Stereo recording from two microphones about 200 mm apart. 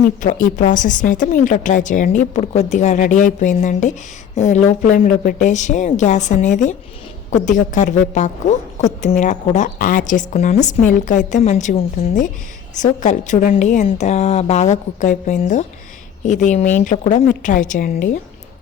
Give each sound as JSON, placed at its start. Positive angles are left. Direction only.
{"t": 0.2, "sound": "a woman's voice", "side_deg": 40}